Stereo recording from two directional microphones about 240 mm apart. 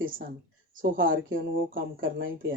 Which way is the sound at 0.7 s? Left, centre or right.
Right.